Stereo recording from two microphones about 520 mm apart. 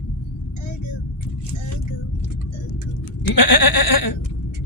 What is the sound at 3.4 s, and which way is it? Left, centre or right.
Goat, left.